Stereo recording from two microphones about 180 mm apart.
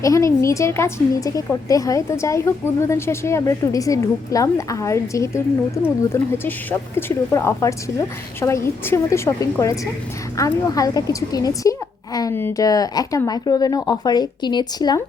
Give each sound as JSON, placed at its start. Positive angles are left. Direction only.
{"t": 0.0, "sound": "speech", "side_deg": 15}